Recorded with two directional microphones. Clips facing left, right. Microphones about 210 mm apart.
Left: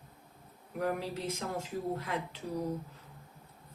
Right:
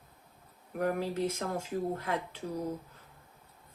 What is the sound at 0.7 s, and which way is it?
Speech, 50° right (ahead or behind).